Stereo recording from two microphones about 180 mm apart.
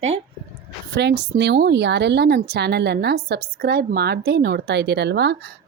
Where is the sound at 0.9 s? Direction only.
65° right (ahead or behind).